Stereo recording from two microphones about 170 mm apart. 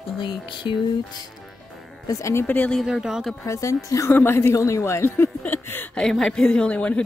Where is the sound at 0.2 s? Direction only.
30° left (ahead or behind).